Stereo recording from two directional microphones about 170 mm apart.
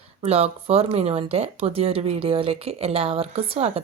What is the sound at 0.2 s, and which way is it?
A woman's voice, 35° right (ahead or behind).